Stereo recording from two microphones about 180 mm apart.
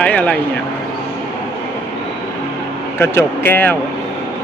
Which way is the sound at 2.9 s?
10° left (ahead or behind).